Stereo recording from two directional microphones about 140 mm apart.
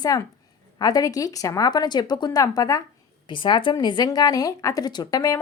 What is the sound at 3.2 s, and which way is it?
A woman's voice, 35° left (ahead or behind).